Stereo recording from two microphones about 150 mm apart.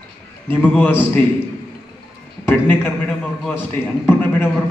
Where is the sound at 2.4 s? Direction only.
15° left (ahead or behind).